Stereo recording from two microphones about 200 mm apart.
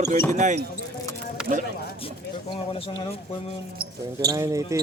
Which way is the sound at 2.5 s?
25° left (ahead or behind).